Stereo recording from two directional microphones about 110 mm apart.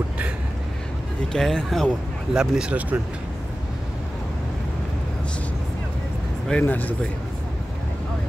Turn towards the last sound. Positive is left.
turn(degrees=15)  # may be behind; listen again after turning